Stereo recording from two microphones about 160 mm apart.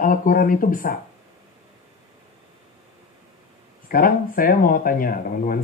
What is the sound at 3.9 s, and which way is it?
Speech, 65° left (ahead or behind).